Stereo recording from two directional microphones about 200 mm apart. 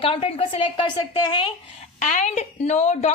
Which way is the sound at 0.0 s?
30° left (ahead or behind).